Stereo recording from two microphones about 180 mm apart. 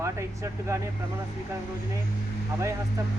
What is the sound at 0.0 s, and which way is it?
Speech, 15° right (ahead or behind).